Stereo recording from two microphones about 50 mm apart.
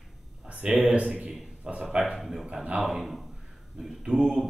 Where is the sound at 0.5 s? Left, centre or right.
Right.